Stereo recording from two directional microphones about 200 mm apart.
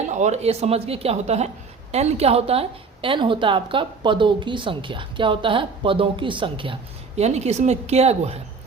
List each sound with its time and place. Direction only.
0.1 s a woman's voice: 35° right (ahead or behind)